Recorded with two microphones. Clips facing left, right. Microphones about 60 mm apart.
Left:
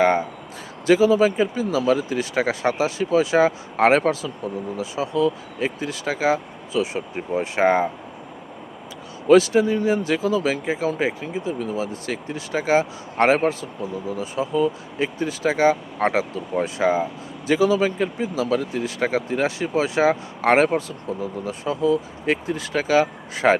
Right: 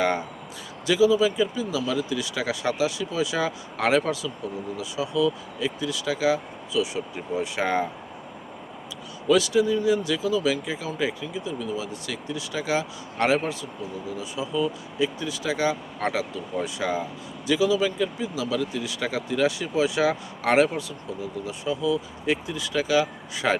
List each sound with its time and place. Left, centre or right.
0.0 s speech: left
0.9 s speech: left
9.2 s speech: left